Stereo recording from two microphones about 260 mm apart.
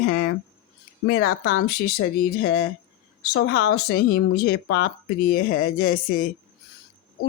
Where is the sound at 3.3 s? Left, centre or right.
Left.